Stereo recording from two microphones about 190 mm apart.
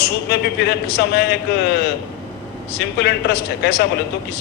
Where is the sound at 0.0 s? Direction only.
60° left (ahead or behind).